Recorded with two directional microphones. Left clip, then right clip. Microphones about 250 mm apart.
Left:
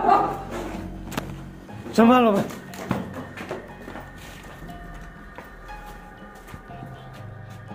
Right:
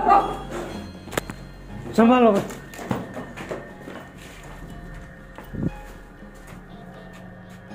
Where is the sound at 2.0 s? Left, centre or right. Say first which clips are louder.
Right 1 dB; centre.